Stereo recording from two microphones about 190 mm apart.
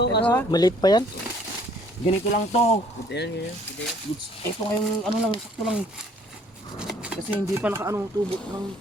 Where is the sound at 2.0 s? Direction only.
35° left (ahead or behind).